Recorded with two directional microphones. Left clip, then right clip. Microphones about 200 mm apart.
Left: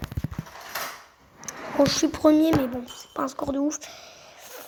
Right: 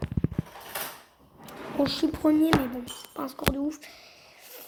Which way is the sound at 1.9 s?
50° left (ahead or behind).